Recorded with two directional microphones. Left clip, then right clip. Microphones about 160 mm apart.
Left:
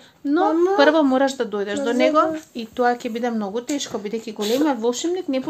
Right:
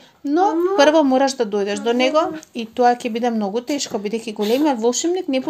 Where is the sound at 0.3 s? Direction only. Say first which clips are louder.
Right 1 dB; 25° right (ahead or behind).